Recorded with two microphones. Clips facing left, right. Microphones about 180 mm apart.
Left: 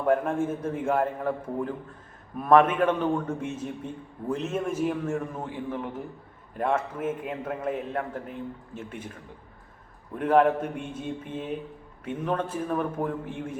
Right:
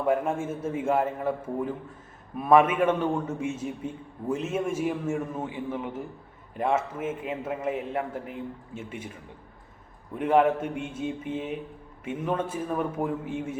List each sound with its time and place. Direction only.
0.0 s a man's voice: 10° right (ahead or behind)
10.2 s a man's voice: 5° right (ahead or behind)